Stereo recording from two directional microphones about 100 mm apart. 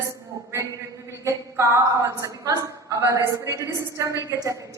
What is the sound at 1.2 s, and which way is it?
A woman's voice, 30° right (ahead or behind).